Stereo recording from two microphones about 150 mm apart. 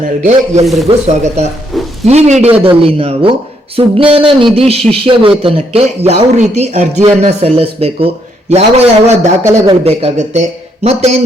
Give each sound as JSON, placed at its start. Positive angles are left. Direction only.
{"t": 0.2, "sound": "speech", "side_deg": -50}
{"t": 0.6, "sound": "speech", "side_deg": 0}
{"t": 0.9, "sound": "speech", "side_deg": -50}
{"t": 1.7, "sound": "a sound", "side_deg": 0}
{"t": 2.0, "sound": "a man's voice", "side_deg": -50}